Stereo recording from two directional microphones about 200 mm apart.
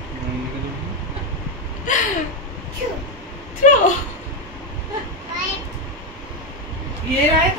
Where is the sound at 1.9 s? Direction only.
40° left (ahead or behind).